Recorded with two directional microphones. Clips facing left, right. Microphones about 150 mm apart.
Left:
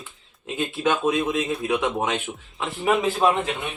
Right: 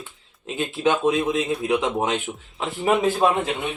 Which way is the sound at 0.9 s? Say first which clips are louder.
Right 2 dB; 20° right (ahead or behind).